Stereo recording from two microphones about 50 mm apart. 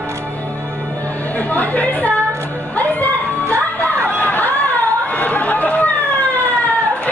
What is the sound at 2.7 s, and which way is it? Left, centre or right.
Music, left.